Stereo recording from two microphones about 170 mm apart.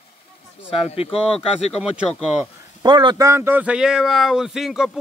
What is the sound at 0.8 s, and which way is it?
Speech, 35° left (ahead or behind).